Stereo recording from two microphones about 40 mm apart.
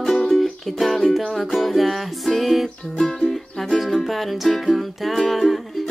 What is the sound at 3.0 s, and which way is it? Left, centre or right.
Music, centre.